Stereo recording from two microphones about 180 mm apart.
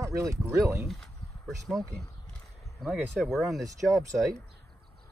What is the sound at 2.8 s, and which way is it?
Speech, centre (ahead or behind).